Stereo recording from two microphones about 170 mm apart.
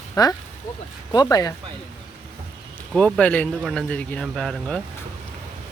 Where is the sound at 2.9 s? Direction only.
5° left (ahead or behind).